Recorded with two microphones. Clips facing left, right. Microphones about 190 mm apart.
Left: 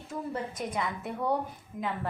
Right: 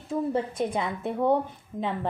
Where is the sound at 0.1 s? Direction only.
30° right (ahead or behind).